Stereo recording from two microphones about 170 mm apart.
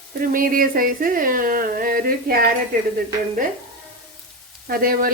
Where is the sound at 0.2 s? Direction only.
55° right (ahead or behind).